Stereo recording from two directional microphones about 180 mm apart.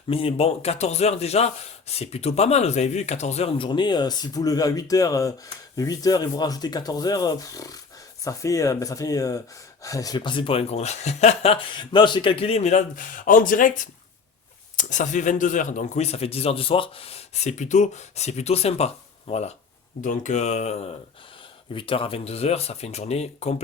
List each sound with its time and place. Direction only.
0.1 s speech: 30° left (ahead or behind)